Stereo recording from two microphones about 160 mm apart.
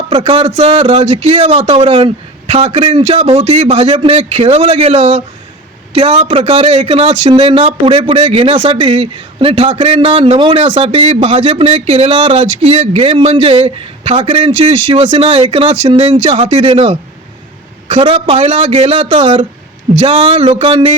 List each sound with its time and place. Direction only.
0.1 s speech: 40° right (ahead or behind)